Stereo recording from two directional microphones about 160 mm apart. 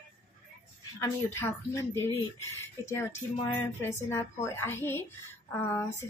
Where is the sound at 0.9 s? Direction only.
15° left (ahead or behind).